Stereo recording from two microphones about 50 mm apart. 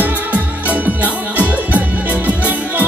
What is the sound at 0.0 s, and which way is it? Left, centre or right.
Music, right.